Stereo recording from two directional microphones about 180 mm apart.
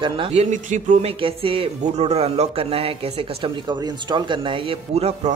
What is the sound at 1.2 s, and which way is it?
Speech, 30° right (ahead or behind).